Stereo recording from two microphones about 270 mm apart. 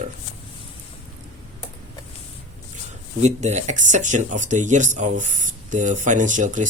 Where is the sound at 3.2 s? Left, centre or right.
Right.